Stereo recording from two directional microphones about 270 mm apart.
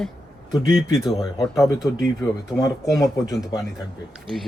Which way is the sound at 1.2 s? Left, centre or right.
Centre.